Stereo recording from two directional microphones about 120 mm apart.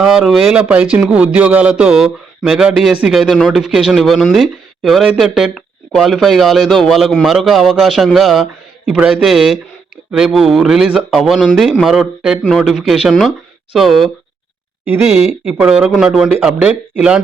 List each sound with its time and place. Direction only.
0.0 s speech: 5° right (ahead or behind)
14.8 s speech: 15° right (ahead or behind)